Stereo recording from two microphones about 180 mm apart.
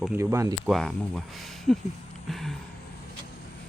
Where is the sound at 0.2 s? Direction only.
15° right (ahead or behind).